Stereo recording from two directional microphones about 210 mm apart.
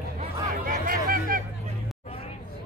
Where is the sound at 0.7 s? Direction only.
45° right (ahead or behind).